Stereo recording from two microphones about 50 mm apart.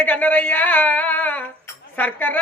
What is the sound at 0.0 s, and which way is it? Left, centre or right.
A man's voice, left.